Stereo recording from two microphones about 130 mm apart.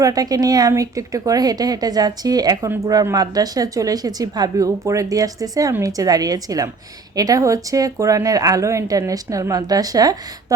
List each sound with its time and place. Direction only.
0.0 s speech: 30° right (ahead or behind)